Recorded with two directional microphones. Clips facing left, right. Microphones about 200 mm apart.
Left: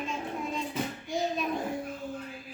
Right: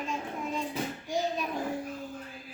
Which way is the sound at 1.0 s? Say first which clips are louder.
Even; 10° right (ahead or behind).